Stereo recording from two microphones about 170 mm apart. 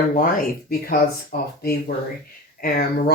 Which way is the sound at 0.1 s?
55° left (ahead or behind).